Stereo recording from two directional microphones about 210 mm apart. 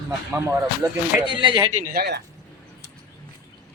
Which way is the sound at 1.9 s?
50° right (ahead or behind).